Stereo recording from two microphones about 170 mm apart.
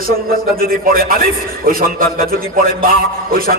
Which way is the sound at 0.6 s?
60° right (ahead or behind).